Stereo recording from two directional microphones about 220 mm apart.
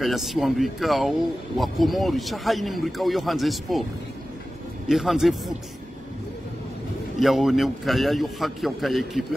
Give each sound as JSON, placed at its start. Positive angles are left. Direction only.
{"t": 0.0, "sound": "speech", "side_deg": 0}
{"t": 4.8, "sound": "speech", "side_deg": 0}
{"t": 7.2, "sound": "speech", "side_deg": 0}